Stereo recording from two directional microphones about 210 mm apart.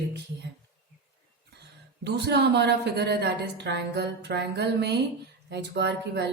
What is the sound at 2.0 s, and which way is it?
Music, 55° right (ahead or behind).